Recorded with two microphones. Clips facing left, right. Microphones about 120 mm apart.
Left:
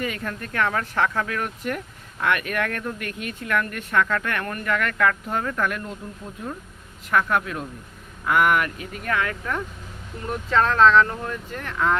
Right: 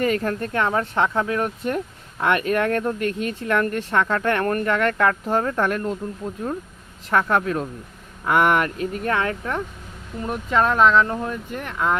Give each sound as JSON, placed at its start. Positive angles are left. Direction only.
{"t": 0.0, "sound": "speech", "side_deg": -40}
{"t": 7.1, "sound": "speech", "side_deg": -30}
{"t": 10.2, "sound": "speech", "side_deg": -15}